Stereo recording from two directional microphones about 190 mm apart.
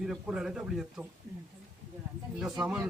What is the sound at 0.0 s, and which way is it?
Speech, 5° right (ahead or behind).